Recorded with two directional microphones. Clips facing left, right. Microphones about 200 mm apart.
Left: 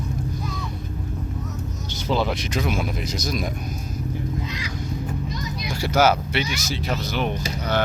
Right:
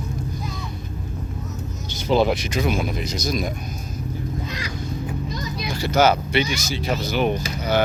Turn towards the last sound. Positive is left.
turn(degrees=-5)  # may be behind; listen again after turning